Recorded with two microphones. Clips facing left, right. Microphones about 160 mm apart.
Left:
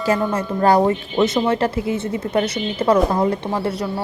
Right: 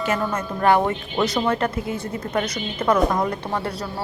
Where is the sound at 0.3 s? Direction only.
35° left (ahead or behind).